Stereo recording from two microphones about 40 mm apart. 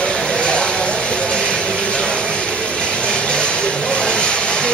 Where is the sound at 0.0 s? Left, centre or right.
Left.